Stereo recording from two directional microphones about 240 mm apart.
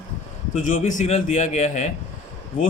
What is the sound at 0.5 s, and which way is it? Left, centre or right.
A man's voice, left.